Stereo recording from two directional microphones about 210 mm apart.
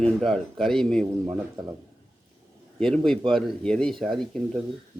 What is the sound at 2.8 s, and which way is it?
A man's voice, centre (ahead or behind).